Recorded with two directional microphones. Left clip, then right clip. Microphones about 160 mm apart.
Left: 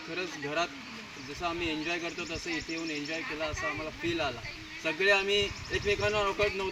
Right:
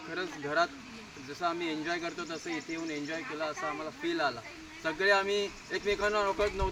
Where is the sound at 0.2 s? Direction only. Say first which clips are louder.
Right 2 dB; 20° left (ahead or behind).